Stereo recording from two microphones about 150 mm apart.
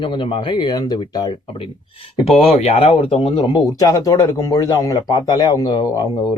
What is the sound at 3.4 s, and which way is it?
A man's voice, 30° left (ahead or behind).